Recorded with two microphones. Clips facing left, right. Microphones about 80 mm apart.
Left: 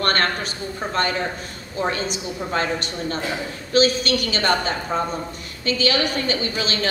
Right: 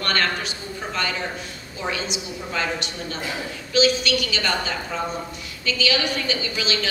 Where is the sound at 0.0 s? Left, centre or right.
Left.